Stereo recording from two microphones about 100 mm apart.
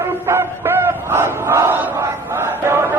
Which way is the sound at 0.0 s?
25° right (ahead or behind).